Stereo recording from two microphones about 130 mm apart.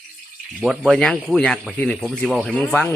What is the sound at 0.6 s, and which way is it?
Speech, 5° right (ahead or behind).